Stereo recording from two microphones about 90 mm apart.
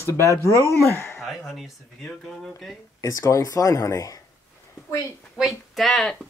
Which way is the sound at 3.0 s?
35° left (ahead or behind).